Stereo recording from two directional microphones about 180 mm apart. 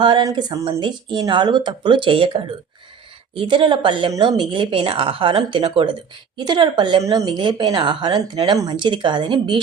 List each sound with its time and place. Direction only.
0.0 s a woman's voice: 25° right (ahead or behind)